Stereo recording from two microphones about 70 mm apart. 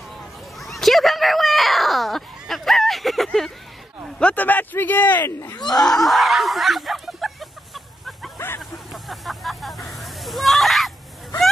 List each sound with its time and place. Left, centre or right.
0.6 s a sound: centre
4.2 s speech: left
5.8 s snicker: centre
8.5 s hubbub: centre